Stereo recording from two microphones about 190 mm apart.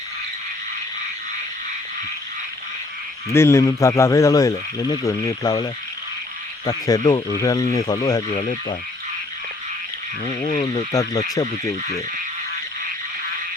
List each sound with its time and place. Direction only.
3.2 s speech: 15° left (ahead or behind)
8.3 s speech: 35° left (ahead or behind)
10.4 s speech: 35° left (ahead or behind)
11.4 s speech: 20° left (ahead or behind)